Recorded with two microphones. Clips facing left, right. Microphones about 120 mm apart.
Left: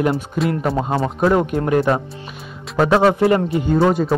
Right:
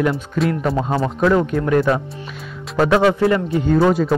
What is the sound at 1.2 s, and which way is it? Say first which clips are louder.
Speech: even; 30° left (ahead or behind).